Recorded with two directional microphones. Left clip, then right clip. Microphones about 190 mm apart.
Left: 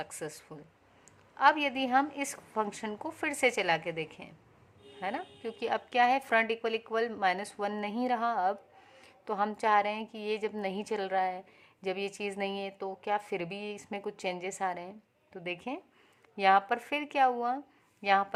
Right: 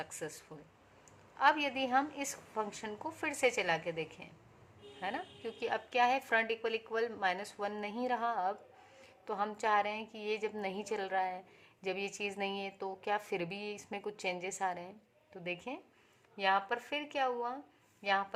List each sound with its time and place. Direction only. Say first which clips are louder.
0.0 s a woman's voice: left 3 dB; 25° left (ahead or behind)
16.3 s speech: left 7 dB; 35° left (ahead or behind)